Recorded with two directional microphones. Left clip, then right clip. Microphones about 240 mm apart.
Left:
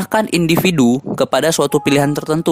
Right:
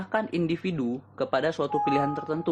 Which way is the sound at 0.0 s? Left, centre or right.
Left.